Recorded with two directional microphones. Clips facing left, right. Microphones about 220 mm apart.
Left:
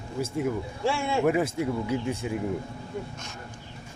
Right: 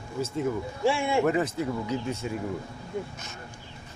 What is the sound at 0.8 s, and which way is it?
Speech, 10° right (ahead or behind).